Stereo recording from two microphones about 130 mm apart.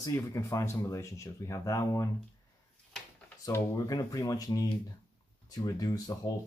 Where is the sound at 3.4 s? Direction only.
25° left (ahead or behind).